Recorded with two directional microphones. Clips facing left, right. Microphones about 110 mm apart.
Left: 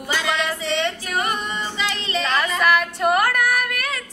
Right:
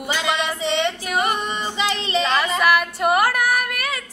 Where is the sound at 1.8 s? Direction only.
20° right (ahead or behind).